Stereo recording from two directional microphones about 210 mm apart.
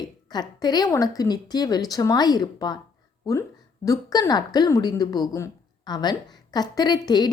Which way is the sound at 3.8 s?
15° left (ahead or behind).